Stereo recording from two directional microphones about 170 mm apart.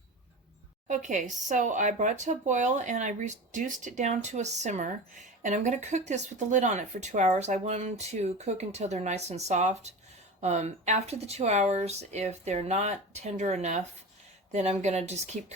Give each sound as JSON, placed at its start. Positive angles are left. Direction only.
{"t": 0.9, "sound": "speech", "side_deg": -45}